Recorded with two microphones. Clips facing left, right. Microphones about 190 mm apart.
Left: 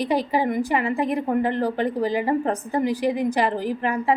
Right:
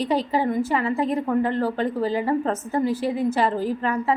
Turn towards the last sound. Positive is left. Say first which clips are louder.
# even
turn(degrees=15)  # may be behind; listen again after turning